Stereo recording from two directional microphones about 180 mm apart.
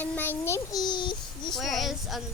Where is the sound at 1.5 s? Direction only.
Centre (ahead or behind).